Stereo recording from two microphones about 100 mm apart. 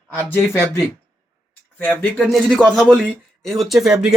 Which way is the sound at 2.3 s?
5° left (ahead or behind).